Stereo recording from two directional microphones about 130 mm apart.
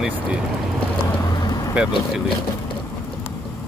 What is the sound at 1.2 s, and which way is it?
Vehicle, 30° left (ahead or behind).